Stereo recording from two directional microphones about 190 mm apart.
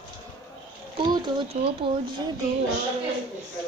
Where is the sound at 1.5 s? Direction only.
25° right (ahead or behind).